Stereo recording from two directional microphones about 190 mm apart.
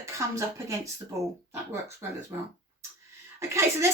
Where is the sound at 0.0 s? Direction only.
15° right (ahead or behind).